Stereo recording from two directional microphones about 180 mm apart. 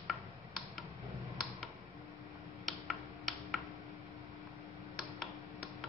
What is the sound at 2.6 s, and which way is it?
Tick-tock, centre (ahead or behind).